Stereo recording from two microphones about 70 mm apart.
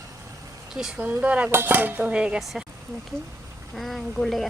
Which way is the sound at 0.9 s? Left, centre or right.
Centre.